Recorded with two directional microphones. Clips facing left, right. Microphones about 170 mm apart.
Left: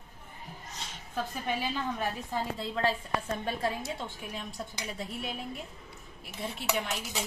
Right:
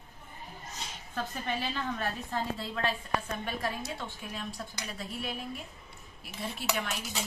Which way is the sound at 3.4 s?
25° left (ahead or behind).